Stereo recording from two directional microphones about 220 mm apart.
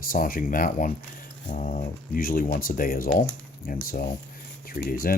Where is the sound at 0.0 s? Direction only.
40° left (ahead or behind).